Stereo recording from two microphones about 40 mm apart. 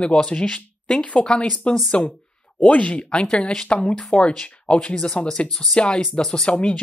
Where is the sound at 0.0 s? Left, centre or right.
Left.